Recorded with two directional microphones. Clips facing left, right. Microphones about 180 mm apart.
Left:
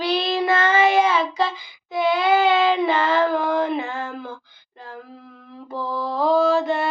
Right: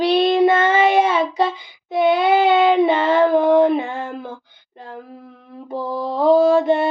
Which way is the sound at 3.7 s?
25° right (ahead or behind).